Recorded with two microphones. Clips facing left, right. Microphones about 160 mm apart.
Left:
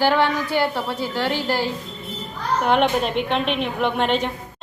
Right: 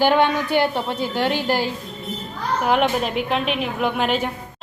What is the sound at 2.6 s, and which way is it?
A child's voice, 5° right (ahead or behind).